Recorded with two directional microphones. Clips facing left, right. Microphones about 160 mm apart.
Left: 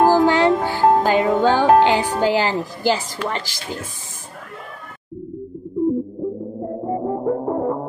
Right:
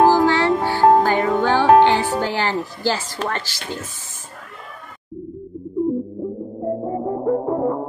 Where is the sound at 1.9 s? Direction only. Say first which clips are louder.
Left 1 dB; 15° left (ahead or behind).